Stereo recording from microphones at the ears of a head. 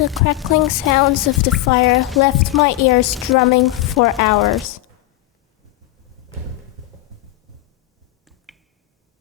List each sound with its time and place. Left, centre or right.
0.0 s a woman's voice: left